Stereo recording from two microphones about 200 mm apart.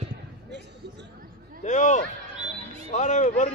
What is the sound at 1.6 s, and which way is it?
Speech, 35° left (ahead or behind).